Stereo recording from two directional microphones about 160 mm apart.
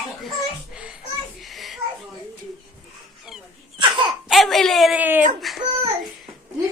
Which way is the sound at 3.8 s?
30° right (ahead or behind).